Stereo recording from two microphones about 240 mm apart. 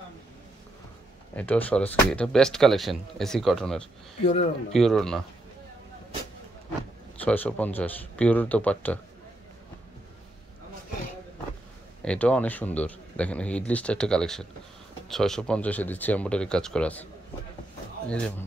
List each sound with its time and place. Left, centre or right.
1.3 s speech: centre
4.2 s a man's voice: left
4.7 s speech: centre
7.2 s speech: centre
12.0 s speech: centre